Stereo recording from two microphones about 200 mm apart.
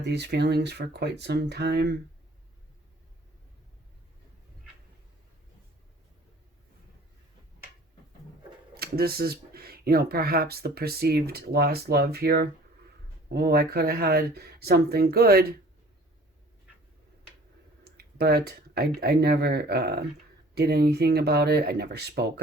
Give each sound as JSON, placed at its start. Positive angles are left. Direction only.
{"t": 0.0, "sound": "speech", "side_deg": -55}
{"t": 8.7, "sound": "speech", "side_deg": -50}
{"t": 17.8, "sound": "speech", "side_deg": -55}